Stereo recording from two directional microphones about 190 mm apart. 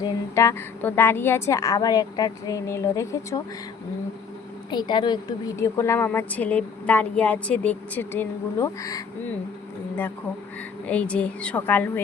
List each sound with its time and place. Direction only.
0.0 s a woman's voice: 15° left (ahead or behind)
4.7 s a woman's voice: 25° left (ahead or behind)
10.8 s a woman's voice: 5° left (ahead or behind)